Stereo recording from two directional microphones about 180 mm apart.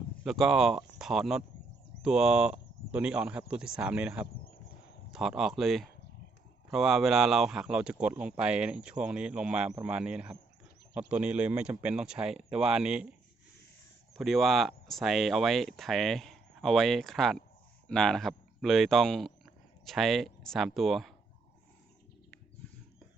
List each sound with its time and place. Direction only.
0.3 s speech: centre (ahead or behind)
4.3 s insect: 55° left (ahead or behind)
5.1 s speech: 5° right (ahead or behind)
14.2 s speech: centre (ahead or behind)